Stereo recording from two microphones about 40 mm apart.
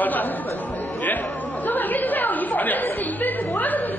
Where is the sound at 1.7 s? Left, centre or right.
Left.